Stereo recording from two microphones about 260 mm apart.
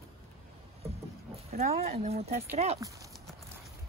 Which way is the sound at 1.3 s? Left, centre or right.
Right.